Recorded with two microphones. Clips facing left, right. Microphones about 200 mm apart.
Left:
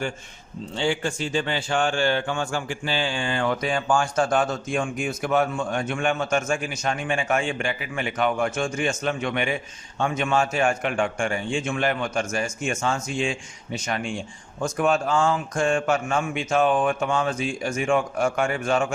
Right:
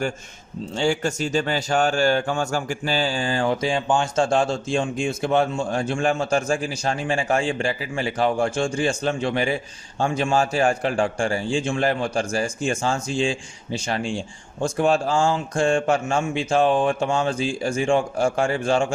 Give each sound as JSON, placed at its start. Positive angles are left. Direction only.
{"t": 0.8, "sound": "a man's voice", "side_deg": -45}